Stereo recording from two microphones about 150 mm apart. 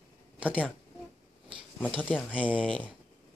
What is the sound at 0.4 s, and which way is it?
Speech, 10° right (ahead or behind).